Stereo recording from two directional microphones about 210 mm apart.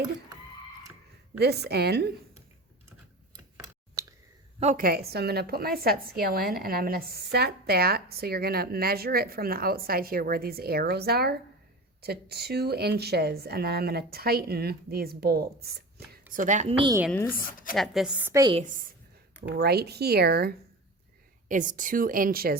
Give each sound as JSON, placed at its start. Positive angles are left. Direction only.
{"t": 1.4, "sound": "a woman's voice", "side_deg": -50}
{"t": 4.6, "sound": "a woman's voice", "side_deg": -40}
{"t": 16.3, "sound": "a woman's voice", "side_deg": -35}
{"t": 17.1, "sound": "speech", "side_deg": 10}
{"t": 17.3, "sound": "a woman's voice", "side_deg": 40}
{"t": 17.7, "sound": "a woman's voice", "side_deg": 0}
{"t": 18.5, "sound": "a woman's voice", "side_deg": -40}
{"t": 19.5, "sound": "a woman's voice", "side_deg": -50}
{"t": 21.5, "sound": "a woman's voice", "side_deg": -40}